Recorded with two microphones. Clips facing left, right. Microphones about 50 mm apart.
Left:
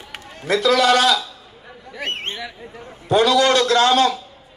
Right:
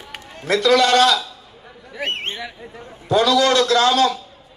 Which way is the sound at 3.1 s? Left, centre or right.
Left.